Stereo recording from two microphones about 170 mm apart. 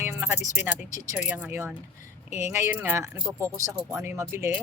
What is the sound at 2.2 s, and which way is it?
Speech, 40° left (ahead or behind).